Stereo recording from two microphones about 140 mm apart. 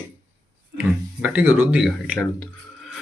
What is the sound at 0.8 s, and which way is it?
Speech, 10° right (ahead or behind).